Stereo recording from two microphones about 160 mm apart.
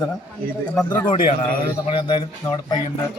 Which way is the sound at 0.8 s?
25° left (ahead or behind).